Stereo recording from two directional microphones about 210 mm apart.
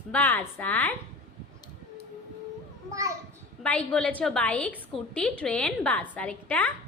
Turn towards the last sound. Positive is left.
turn(degrees=5)  # may be behind; listen again after turning